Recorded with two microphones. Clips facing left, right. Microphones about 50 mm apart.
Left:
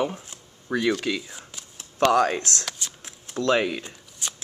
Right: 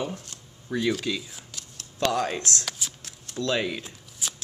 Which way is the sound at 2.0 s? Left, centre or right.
Left.